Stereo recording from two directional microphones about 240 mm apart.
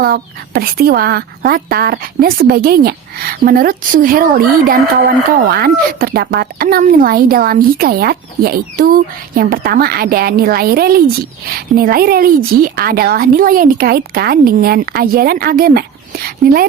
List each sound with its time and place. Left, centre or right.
0.0 s a woman's voice: right